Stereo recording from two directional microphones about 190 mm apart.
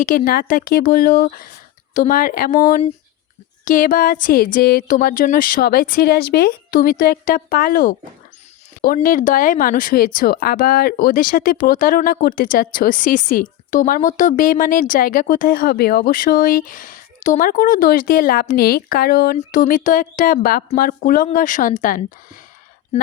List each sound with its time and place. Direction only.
0.0 s speech: 45° left (ahead or behind)